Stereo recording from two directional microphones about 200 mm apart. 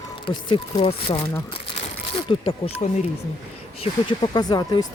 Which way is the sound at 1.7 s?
30° left (ahead or behind).